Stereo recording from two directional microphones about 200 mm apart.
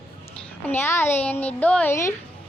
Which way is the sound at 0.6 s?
10° left (ahead or behind).